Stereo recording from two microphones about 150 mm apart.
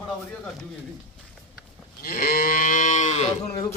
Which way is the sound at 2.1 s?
90° left.